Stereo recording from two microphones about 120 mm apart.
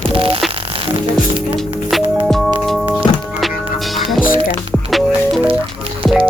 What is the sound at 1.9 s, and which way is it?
Music, centre (ahead or behind).